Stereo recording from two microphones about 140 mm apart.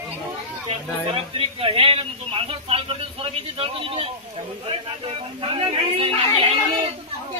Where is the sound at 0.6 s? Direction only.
40° right (ahead or behind).